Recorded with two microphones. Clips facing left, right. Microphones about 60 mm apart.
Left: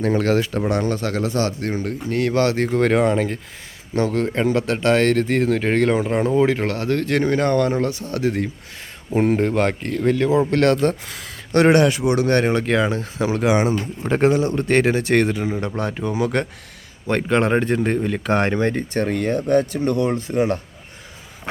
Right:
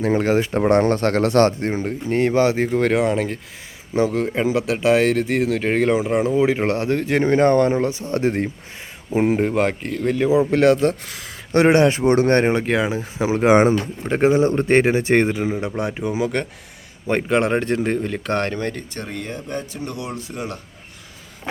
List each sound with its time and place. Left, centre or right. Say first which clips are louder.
0.1 s speech: right 2 dB; centre; by 1.5 s right
1.5 s speech: right 2 dB; right; by 6.5 s centre
6.7 s speech: right 1 dB; right
9.0 s speech: even; centre
11.5 s speech: even; right
12.6 s speech: left 1 dB; centre
13.4 s speech: right 5 dB; right
14.0 s speech: left 2 dB; centre
14.3 s speech: right 3 dB; right; by 18.4 s centre
18.4 s speech: left 5 dB; left
19.0 s speech: left 10 dB; left